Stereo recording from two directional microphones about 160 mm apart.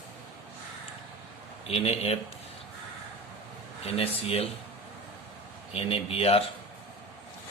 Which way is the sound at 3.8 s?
40° left (ahead or behind).